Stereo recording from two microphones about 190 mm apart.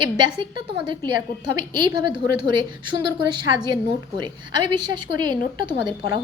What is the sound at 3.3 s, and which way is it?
A woman's voice, 25° right (ahead or behind).